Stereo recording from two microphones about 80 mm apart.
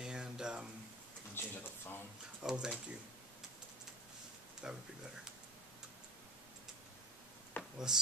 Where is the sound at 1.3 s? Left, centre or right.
Left.